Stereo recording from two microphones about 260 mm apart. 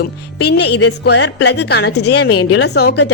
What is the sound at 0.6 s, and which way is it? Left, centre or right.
Speech, left.